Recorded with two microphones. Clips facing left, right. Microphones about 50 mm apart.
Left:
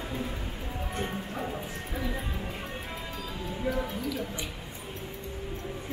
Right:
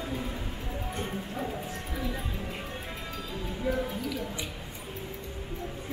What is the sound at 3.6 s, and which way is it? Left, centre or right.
Music, centre.